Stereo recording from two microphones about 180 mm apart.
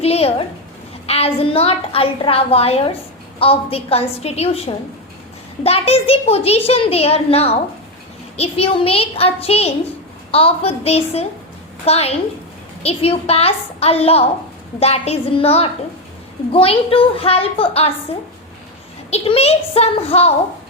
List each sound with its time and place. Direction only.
0.0 s a woman's voice: 35° left (ahead or behind)
19.1 s a child's voice: 35° left (ahead or behind)